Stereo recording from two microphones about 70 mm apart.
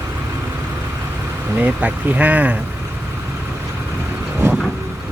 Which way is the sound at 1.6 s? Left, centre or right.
Right.